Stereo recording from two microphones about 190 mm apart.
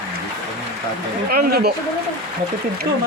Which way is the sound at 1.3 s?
50° right (ahead or behind).